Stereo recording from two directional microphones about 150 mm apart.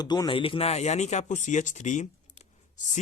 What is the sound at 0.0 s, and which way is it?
Speech, 30° left (ahead or behind).